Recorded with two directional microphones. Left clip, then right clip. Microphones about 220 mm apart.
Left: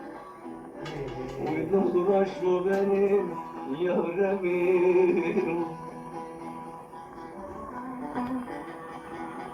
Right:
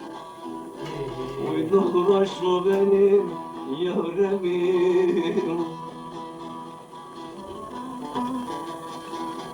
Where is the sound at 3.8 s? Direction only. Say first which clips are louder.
Right 2 dB; 40° right (ahead or behind).